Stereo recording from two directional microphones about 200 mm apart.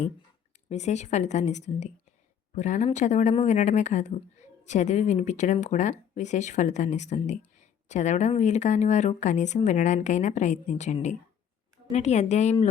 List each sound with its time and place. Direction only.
0.7 s speech: 35° left (ahead or behind)